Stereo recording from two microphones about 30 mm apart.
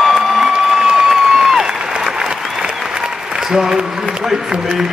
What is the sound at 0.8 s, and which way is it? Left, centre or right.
Applause, centre.